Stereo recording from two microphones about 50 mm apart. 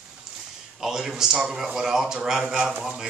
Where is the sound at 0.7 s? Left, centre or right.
Centre.